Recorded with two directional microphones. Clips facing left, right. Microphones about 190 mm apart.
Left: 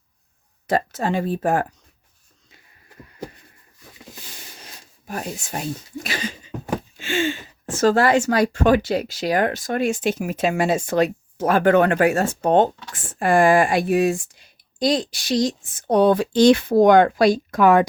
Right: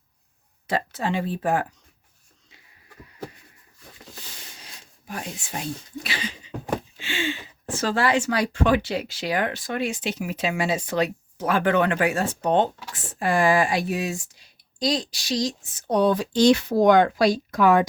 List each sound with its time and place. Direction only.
0.7 s speech: 45° left (ahead or behind)
4.6 s speech: 45° left (ahead or behind)